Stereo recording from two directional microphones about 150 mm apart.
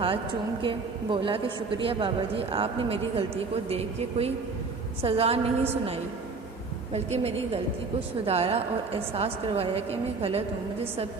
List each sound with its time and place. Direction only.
0.6 s a woman's voice: 35° right (ahead or behind)